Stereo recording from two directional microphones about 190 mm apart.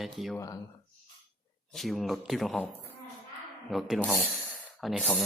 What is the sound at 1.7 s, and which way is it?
Speech, centre (ahead or behind).